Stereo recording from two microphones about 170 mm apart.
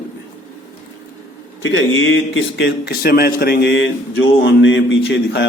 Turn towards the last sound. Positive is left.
turn(degrees=90)